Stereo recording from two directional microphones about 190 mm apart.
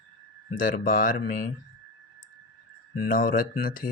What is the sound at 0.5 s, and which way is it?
Speech, 50° left (ahead or behind).